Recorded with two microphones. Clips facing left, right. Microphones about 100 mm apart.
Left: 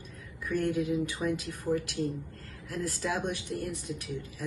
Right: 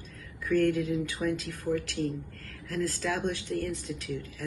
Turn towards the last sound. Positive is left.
turn(degrees=15)  # may be behind; listen again after turning